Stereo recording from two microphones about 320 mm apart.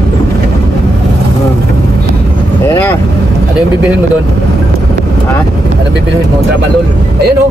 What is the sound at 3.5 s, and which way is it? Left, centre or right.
Speech, centre.